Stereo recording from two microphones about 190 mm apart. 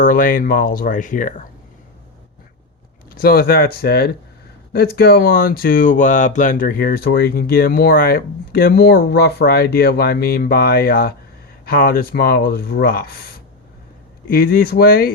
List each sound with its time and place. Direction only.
0.0 s speech: 45° left (ahead or behind)
3.2 s speech: 50° left (ahead or behind)